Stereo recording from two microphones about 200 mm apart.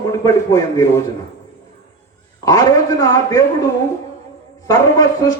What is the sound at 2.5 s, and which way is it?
Speech, 15° left (ahead or behind).